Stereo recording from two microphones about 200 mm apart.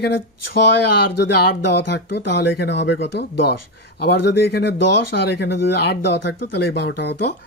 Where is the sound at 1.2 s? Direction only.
60° left (ahead or behind).